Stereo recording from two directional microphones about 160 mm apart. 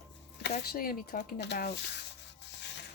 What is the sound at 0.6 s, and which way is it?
Speech, 65° left (ahead or behind).